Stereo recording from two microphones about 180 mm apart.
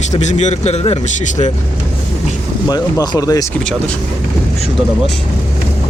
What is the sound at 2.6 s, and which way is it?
Speech, 20° left (ahead or behind).